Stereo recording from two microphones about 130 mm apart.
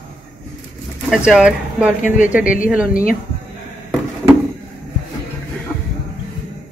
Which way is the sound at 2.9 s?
90° left.